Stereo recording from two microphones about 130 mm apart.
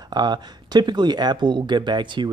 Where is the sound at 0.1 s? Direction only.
35° right (ahead or behind).